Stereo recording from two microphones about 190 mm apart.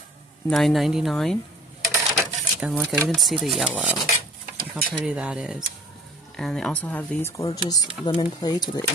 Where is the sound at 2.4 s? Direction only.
Centre (ahead or behind).